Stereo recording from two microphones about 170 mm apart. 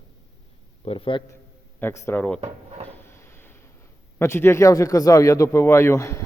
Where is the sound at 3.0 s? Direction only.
15° left (ahead or behind).